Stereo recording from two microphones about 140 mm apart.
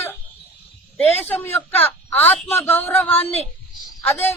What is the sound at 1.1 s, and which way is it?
Speech, 15° left (ahead or behind).